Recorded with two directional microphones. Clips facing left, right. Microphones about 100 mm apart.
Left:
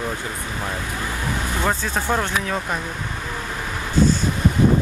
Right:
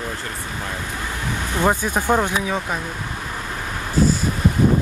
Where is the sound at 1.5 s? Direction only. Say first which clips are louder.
Right 5 dB; 15° right (ahead or behind).